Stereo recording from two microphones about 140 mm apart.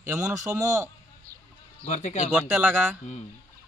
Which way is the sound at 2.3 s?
10° right (ahead or behind).